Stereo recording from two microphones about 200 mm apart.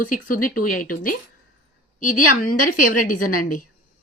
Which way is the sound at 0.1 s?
45° left (ahead or behind).